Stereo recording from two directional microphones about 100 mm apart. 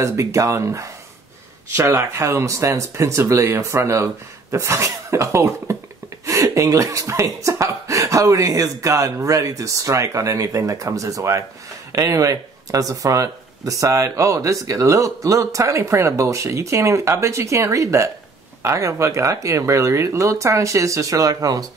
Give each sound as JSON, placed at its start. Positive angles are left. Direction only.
{"t": 0.0, "sound": "speech", "side_deg": -30}